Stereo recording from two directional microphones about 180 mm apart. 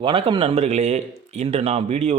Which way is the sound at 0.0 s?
30° right (ahead or behind).